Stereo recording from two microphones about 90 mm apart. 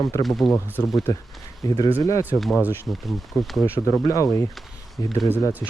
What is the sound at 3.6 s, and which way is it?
Speech, 25° left (ahead or behind).